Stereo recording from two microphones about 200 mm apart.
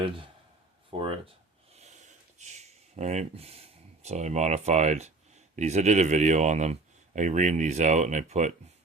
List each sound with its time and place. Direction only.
0.9 s speech: 25° right (ahead or behind)
1.7 s a sound: 35° right (ahead or behind)
5.5 s speech: 35° right (ahead or behind)